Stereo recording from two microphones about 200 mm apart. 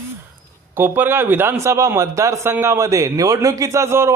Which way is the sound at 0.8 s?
10° right (ahead or behind).